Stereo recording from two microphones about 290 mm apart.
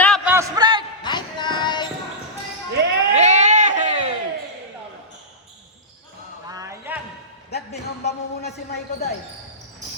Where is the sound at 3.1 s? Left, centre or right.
Right.